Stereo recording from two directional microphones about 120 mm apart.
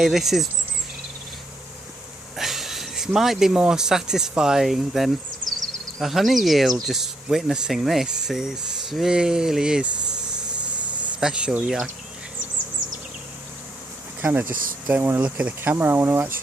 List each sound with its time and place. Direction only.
0.0 s speech: 5° right (ahead or behind)
2.3 s speech: centre (ahead or behind)
11.2 s speech: 5° right (ahead or behind)
14.2 s speech: 15° right (ahead or behind)